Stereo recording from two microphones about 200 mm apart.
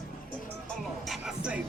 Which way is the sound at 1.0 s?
5° right (ahead or behind).